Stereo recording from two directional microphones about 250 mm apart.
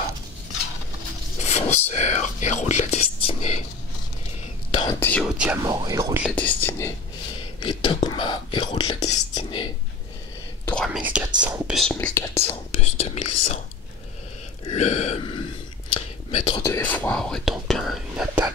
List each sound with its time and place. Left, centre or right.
1.4 s speech: left
4.6 s whispering: left
5.0 s speech: centre
5.6 s speech: centre
6.2 s speech: centre
7.6 s speech: centre
10.6 s speech: centre
12.7 s speech: left
14.6 s speech: left
15.9 s a sound: left
16.6 s speech: centre